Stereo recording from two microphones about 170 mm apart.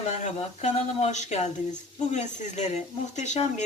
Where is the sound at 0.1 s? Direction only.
45° left (ahead or behind).